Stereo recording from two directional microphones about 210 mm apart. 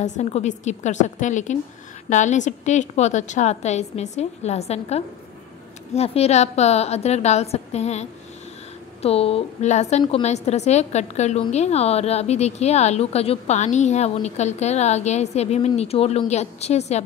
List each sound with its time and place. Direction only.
0.0 s a woman's voice: 35° left (ahead or behind)